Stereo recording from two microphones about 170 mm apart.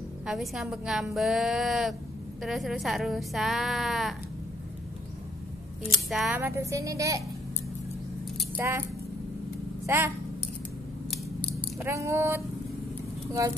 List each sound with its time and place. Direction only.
0.3 s a woman's voice: centre (ahead or behind)
6.0 s a woman's voice: centre (ahead or behind)
6.4 s speech: 15° right (ahead or behind)
8.5 s speech: 15° right (ahead or behind)
9.8 s speech: 15° right (ahead or behind)
11.8 s speech: 15° right (ahead or behind)